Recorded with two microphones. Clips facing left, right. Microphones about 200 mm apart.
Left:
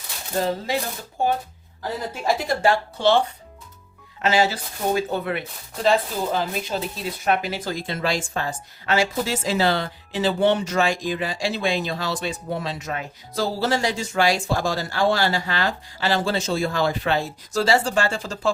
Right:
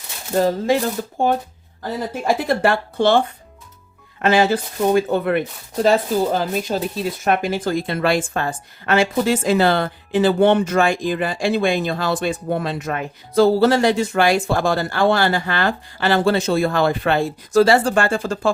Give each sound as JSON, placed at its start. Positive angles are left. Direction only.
{"t": 2.2, "sound": "speech", "side_deg": -60}